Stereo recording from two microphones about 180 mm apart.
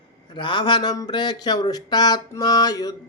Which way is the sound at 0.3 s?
25° left (ahead or behind).